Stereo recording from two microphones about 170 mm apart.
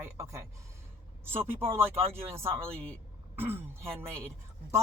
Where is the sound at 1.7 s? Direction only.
15° right (ahead or behind).